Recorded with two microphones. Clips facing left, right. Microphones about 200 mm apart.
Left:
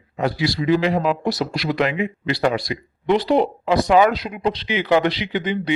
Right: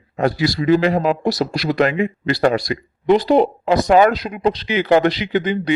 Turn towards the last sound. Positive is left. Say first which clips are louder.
# right 4 dB
turn(degrees=-45)  # may be behind; listen again after turning